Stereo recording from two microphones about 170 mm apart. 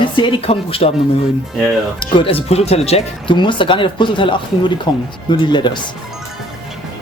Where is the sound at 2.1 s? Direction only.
35° left (ahead or behind).